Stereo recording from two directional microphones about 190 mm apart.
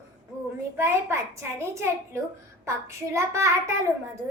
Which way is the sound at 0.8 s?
15° right (ahead or behind).